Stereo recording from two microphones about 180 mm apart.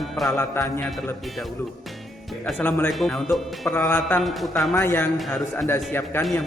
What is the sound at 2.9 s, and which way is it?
Speech, centre (ahead or behind).